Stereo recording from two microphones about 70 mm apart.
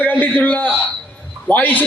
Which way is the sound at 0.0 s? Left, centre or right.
Left.